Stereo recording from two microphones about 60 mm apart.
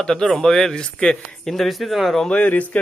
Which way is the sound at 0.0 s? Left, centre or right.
Centre.